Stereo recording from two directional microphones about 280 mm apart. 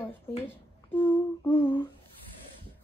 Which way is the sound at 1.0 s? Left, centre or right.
Centre.